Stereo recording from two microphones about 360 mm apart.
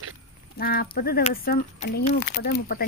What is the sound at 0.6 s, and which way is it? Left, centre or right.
Speech, left.